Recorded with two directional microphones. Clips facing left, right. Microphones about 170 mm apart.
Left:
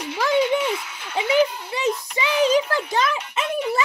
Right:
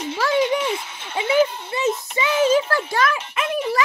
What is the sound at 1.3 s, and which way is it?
A child's voice, 15° left (ahead or behind).